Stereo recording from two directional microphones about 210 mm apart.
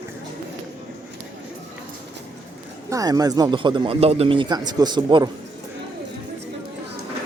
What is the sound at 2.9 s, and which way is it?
Speech, 15° right (ahead or behind).